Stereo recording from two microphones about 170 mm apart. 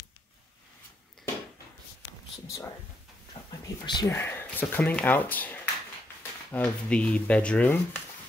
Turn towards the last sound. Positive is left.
turn(degrees=5)  # may be behind; listen again after turning